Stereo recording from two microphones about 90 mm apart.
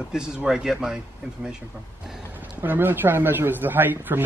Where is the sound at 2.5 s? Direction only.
20° right (ahead or behind).